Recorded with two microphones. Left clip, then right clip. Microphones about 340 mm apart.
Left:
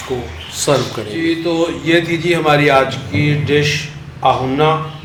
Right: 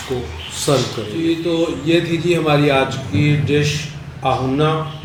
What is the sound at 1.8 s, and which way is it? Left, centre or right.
A man's voice, left.